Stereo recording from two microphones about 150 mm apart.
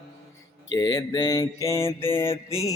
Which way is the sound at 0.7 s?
25° left (ahead or behind).